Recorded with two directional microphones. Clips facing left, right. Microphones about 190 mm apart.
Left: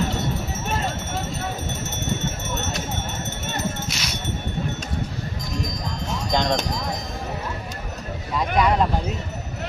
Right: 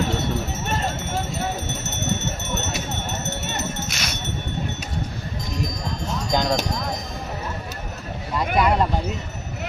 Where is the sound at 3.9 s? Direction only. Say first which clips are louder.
Even; 50° right (ahead or behind).